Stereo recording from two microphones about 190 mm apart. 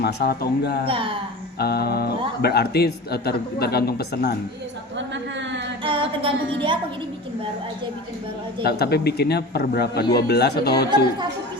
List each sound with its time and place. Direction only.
0.0 s speech: 55° left (ahead or behind)
0.9 s speech: 25° right (ahead or behind)
1.5 s speech: 55° left (ahead or behind)
5.8 s humming: 30° right (ahead or behind)
8.6 s speech: 60° left (ahead or behind)